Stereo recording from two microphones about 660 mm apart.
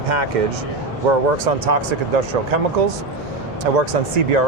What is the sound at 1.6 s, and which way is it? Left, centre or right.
Speech, right.